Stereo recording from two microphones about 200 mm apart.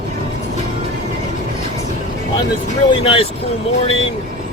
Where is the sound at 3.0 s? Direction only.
30° left (ahead or behind).